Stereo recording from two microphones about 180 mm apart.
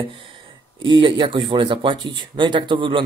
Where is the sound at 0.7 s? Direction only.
25° right (ahead or behind).